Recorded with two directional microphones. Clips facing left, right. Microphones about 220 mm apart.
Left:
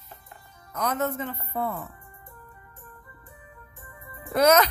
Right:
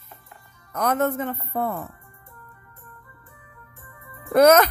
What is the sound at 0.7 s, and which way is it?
Speech, 55° right (ahead or behind).